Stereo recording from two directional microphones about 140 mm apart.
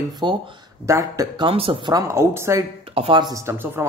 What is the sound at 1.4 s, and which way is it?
Speech, 40° right (ahead or behind).